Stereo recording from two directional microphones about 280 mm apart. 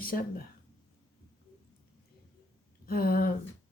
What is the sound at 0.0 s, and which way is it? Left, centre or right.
Speech, left.